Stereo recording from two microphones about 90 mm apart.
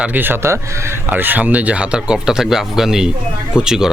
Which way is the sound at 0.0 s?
20° right (ahead or behind).